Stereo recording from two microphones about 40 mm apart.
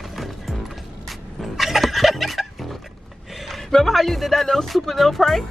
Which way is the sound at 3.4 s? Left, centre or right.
Centre.